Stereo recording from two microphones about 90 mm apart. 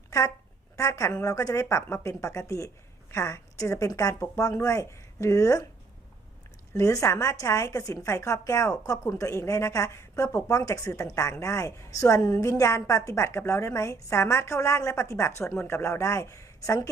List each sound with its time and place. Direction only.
0.8 s a woman's voice: 35° left (ahead or behind)
6.7 s a woman's voice: 35° left (ahead or behind)